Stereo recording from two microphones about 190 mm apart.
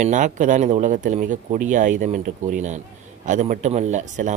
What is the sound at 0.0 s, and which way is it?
Speech, 40° right (ahead or behind).